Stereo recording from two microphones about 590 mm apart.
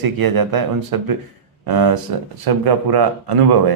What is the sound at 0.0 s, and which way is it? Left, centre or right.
Speech, right.